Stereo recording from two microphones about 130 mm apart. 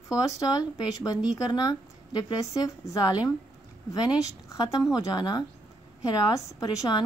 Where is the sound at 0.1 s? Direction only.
30° left (ahead or behind).